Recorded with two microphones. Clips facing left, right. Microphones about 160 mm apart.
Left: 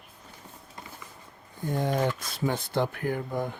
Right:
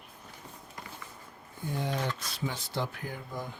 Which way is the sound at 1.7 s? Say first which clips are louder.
Left 6 dB; 50° left (ahead or behind).